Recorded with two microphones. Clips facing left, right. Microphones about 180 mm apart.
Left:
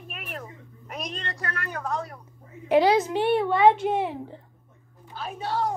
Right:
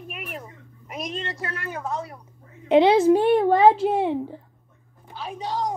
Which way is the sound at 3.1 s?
45° right (ahead or behind).